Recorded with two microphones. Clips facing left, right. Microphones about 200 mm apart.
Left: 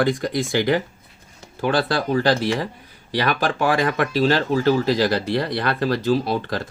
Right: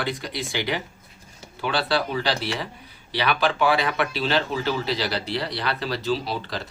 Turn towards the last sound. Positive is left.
turn(degrees=50)  # may be behind; listen again after turning